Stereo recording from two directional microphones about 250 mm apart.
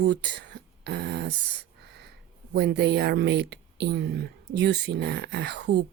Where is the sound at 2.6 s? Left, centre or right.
Right.